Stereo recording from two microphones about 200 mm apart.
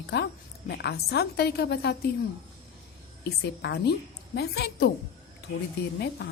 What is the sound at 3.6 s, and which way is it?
A woman's voice, 55° left (ahead or behind).